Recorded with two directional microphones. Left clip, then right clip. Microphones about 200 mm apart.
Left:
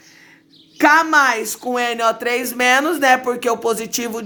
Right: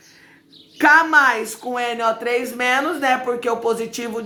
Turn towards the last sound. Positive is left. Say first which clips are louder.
# left 1 dB
turn(degrees=45)  # may be behind; listen again after turning